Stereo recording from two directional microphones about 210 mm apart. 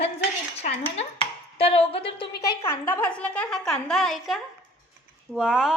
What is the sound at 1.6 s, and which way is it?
Speech, 25° left (ahead or behind).